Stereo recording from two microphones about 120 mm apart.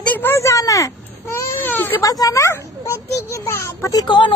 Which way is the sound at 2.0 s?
30° left (ahead or behind).